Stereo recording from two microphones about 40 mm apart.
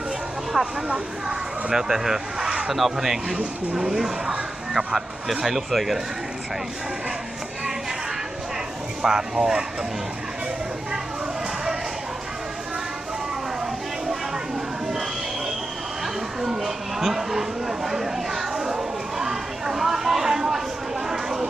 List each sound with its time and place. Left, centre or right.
0.6 s speech: centre
9.0 s speech: centre
16.4 s a sound: centre